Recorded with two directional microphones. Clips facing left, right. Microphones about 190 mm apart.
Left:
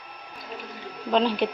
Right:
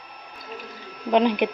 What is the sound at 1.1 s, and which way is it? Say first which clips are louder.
Speech: right 3 dB; 15° right (ahead or behind).